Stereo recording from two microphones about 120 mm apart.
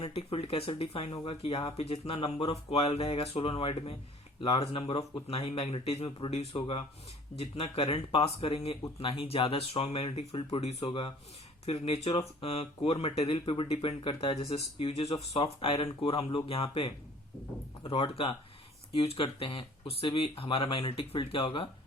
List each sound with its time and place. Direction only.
0.0 s speech: 55° left (ahead or behind)